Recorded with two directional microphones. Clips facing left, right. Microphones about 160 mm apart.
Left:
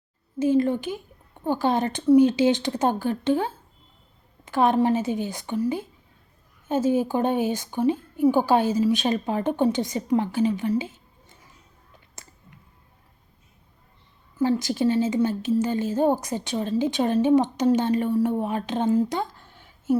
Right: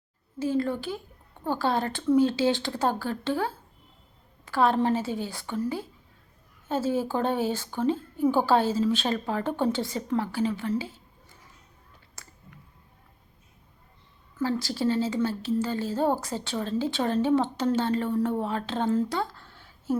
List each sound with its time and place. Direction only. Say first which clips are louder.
0.3 s a woman's voice: left 6 dB; 20° left (ahead or behind)
12.1 s a sound: left 1 dB; 20° left (ahead or behind)
14.4 s a woman's voice: left 5 dB; 20° left (ahead or behind)